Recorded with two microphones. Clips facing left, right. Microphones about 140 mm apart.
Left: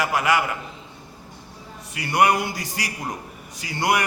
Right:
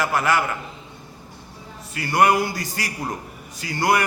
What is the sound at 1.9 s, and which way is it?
A man's voice, 20° left (ahead or behind).